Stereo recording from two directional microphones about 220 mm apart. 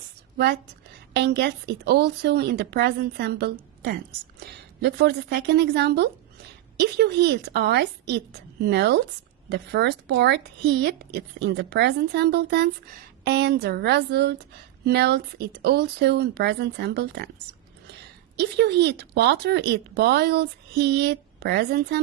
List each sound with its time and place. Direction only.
0.3 s a woman's voice: 50° right (ahead or behind)
18.3 s speech: 50° right (ahead or behind)